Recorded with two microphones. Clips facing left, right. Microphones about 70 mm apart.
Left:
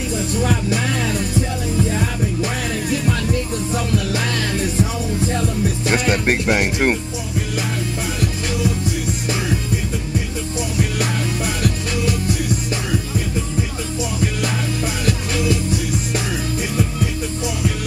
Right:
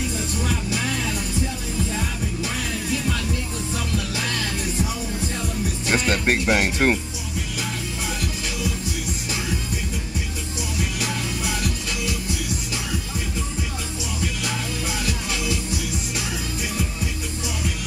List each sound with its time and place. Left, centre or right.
5.9 s speech: centre
11.0 s music: left